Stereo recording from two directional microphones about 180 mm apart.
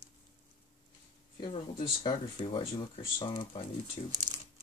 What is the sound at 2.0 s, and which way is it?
Speech, 25° left (ahead or behind).